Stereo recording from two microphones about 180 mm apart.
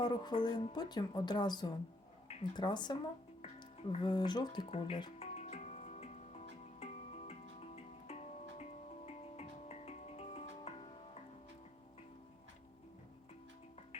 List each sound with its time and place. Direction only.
0.0 s speech: 25° left (ahead or behind)
5.3 s music: 35° left (ahead or behind)